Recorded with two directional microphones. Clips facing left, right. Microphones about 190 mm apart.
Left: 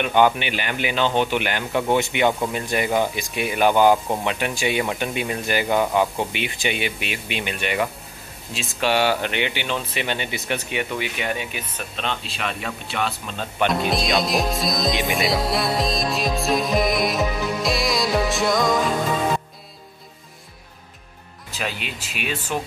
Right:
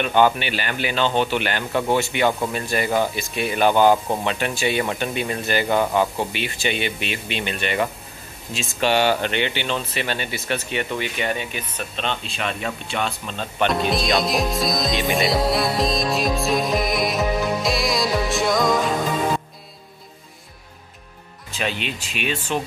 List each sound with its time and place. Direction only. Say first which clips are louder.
0.0 s speech: even; 15° left (ahead or behind)
17.6 s music: even; centre (ahead or behind)
21.5 s speech: right 3 dB; 5° left (ahead or behind)